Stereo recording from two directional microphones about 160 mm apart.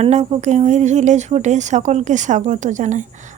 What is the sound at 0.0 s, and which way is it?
Speech, 40° right (ahead or behind).